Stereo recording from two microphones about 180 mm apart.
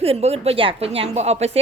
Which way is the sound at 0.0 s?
35° right (ahead or behind).